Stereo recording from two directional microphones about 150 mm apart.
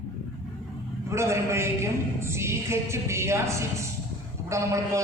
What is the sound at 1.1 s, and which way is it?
A woman's voice, 20° right (ahead or behind).